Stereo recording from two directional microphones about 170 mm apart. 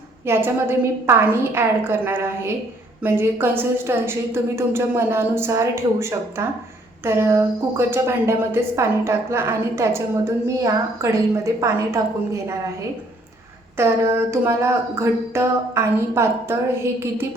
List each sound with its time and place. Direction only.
0.3 s a woman's voice: 15° right (ahead or behind)
13.7 s a woman's voice: 15° right (ahead or behind)